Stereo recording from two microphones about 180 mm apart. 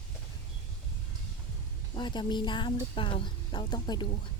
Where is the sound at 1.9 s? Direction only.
25° left (ahead or behind).